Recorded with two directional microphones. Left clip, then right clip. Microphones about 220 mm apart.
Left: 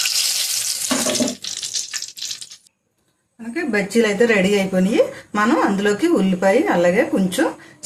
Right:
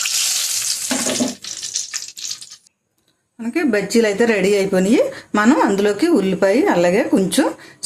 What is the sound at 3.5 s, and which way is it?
Speech, 45° right (ahead or behind).